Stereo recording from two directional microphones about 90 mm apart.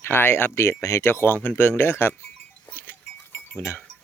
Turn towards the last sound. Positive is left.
turn(degrees=20)  # may be behind; listen again after turning